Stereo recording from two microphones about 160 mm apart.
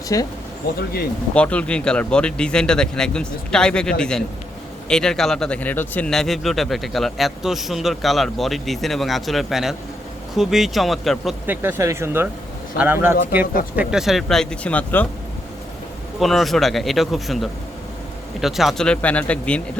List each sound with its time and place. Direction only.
0.1 s speech: 20° left (ahead or behind)
1.3 s a man's voice: 5° left (ahead or behind)
11.4 s speech: 15° right (ahead or behind)
13.7 s a man's voice: 5° right (ahead or behind)
16.2 s a man's voice: centre (ahead or behind)